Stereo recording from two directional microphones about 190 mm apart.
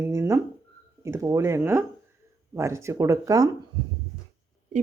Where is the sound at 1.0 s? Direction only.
15° right (ahead or behind).